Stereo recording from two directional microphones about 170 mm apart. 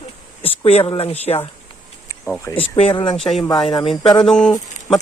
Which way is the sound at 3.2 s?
Centre (ahead or behind).